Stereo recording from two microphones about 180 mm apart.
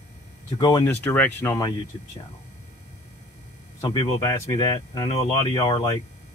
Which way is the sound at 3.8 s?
20° left (ahead or behind).